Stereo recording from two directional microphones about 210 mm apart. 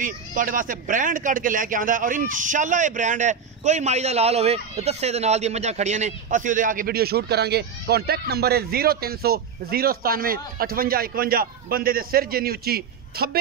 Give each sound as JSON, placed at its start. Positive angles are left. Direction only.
{"t": 0.0, "sound": "speech", "side_deg": -40}